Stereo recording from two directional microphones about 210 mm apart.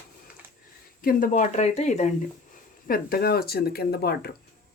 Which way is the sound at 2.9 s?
45° left (ahead or behind).